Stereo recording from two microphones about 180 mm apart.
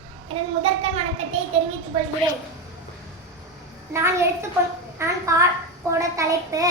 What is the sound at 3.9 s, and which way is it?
Child singing, 15° right (ahead or behind).